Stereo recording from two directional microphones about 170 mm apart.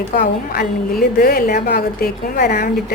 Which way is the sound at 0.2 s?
60° left (ahead or behind).